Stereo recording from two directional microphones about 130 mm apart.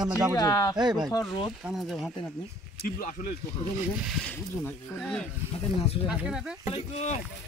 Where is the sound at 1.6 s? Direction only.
Centre (ahead or behind).